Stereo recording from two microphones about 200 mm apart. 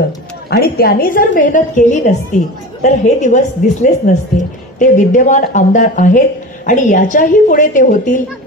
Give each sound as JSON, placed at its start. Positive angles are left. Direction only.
{"t": 0.5, "sound": "a woman's voice", "side_deg": 50}